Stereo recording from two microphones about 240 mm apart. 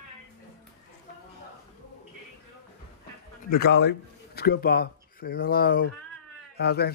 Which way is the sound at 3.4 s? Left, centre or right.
Left.